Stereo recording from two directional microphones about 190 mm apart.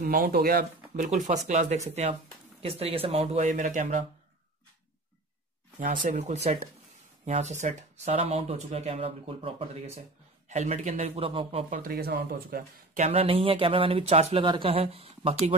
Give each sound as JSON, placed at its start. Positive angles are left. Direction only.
{"t": 0.0, "sound": "speech", "side_deg": -50}
{"t": 1.0, "sound": "speech", "side_deg": -40}
{"t": 5.8, "sound": "speech", "side_deg": -40}
{"t": 11.7, "sound": "speech", "side_deg": -50}